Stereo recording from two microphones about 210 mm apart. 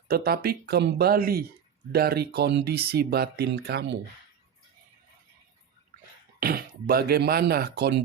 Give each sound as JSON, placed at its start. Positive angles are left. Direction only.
{"t": 0.1, "sound": "speech", "side_deg": -45}
{"t": 6.4, "sound": "speech", "side_deg": -45}